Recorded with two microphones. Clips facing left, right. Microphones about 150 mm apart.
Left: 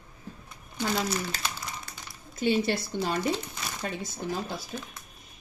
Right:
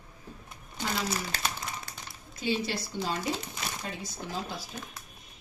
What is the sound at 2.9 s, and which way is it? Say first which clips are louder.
A woman's voice: left 1 dB; 60° left (ahead or behind).